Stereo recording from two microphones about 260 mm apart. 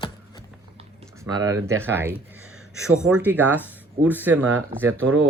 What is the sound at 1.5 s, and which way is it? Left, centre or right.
Speech, right.